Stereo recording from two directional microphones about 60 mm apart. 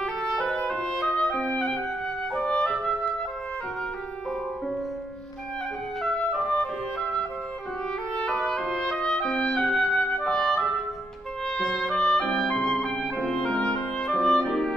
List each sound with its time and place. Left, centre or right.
0.0 s music: centre
1.1 s clarinet: centre
6.0 s clarinet: centre
8.2 s music: centre
8.5 s clarinet: centre
11.4 s music: centre
11.9 s clarinet: centre